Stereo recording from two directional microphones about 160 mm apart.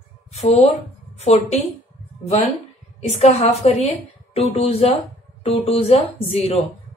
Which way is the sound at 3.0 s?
40° left (ahead or behind).